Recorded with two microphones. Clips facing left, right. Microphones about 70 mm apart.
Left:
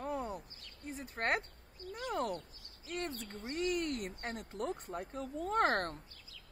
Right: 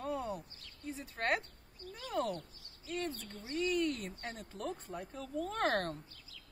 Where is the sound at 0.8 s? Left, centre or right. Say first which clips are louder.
Even; left.